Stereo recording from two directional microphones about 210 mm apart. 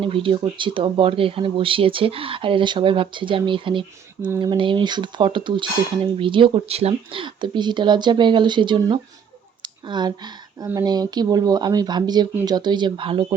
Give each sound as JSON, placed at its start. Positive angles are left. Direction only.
{"t": 0.0, "sound": "speech", "side_deg": -25}